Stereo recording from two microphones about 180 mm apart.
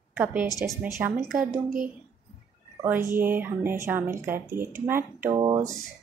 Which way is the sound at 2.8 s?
10° right (ahead or behind).